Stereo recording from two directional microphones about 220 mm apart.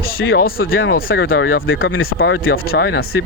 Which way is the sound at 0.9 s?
45° left (ahead or behind).